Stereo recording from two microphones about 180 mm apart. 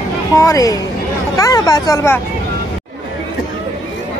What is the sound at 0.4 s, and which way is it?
Speech, 20° left (ahead or behind).